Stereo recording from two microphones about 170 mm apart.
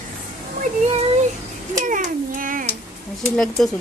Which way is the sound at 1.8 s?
50° right (ahead or behind).